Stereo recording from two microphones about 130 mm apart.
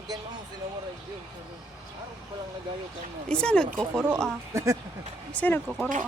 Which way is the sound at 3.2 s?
5° left (ahead or behind).